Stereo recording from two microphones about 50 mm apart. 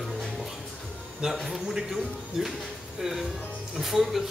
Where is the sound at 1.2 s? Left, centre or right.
Centre.